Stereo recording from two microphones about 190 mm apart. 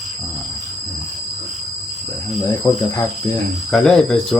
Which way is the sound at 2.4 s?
20° left (ahead or behind).